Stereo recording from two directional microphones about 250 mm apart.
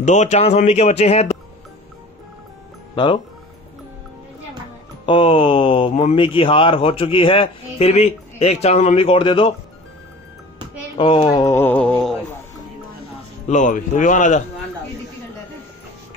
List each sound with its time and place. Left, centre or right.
0.0 s speech: left
5.0 s speech: left
11.0 s speech: centre
13.5 s speech: left